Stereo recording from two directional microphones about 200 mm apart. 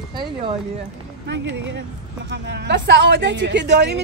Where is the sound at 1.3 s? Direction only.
65° right (ahead or behind).